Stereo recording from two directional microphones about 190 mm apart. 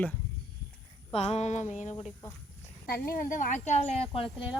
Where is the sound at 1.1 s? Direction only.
30° left (ahead or behind).